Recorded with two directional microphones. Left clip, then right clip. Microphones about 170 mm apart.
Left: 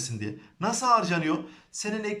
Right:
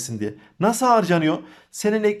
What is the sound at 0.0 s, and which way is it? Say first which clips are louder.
Speech: right 6 dB; 40° right (ahead or behind).